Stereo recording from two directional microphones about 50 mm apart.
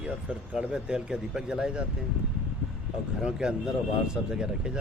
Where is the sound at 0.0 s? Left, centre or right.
Right.